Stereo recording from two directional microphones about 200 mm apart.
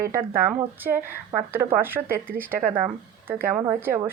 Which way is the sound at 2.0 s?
45° right (ahead or behind).